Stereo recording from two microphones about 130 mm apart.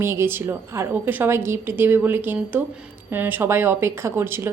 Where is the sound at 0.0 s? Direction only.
20° right (ahead or behind).